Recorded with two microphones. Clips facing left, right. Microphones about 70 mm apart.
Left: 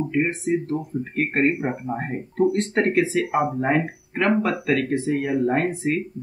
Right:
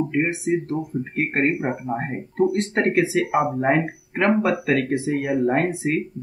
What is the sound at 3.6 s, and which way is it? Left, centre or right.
Speech, centre.